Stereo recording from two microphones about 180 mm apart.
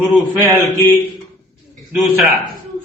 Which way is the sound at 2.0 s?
Centre (ahead or behind).